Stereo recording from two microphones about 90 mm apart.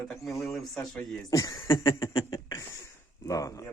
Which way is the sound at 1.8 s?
55° left (ahead or behind).